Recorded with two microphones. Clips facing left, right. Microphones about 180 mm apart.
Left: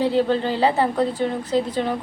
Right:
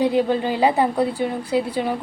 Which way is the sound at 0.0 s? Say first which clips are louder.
Right 1 dB; 15° right (ahead or behind).